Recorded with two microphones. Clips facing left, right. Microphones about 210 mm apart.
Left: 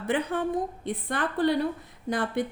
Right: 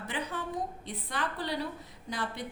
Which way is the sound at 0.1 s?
55° left (ahead or behind).